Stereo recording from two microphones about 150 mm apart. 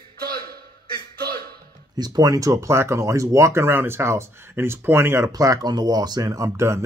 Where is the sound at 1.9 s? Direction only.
25° right (ahead or behind).